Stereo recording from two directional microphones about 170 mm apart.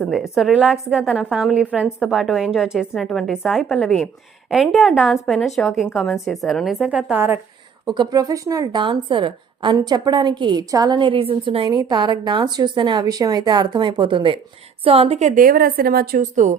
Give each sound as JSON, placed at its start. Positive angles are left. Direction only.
{"t": 0.0, "sound": "a woman's voice", "side_deg": 0}
{"t": 7.9, "sound": "a woman's voice", "side_deg": -25}